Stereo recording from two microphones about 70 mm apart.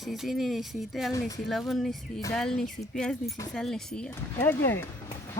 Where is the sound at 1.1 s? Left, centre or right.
Left.